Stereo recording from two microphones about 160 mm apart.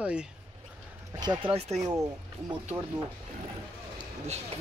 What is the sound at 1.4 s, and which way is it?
Speech, 35° right (ahead or behind).